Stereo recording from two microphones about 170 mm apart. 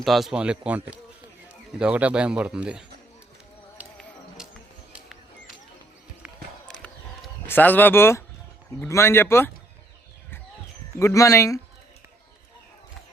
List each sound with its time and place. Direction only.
0.0 s a man's voice: centre (ahead or behind)
4.4 s music: 5° right (ahead or behind)
4.9 s a sound: 5° right (ahead or behind)
6.8 s a sound: 10° left (ahead or behind)
8.8 s speech: 15° left (ahead or behind)
11.0 s speech: 20° left (ahead or behind)